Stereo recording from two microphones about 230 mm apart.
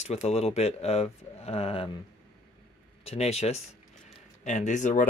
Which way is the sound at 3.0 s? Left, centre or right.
Left.